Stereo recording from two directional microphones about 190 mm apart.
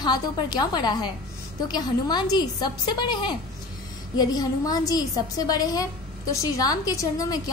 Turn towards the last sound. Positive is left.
turn(degrees=20)  # may be behind; listen again after turning